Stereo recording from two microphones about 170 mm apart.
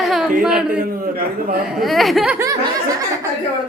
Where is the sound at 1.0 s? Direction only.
60° right (ahead or behind).